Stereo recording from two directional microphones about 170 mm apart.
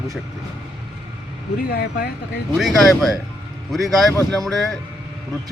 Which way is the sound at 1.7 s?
75° left (ahead or behind).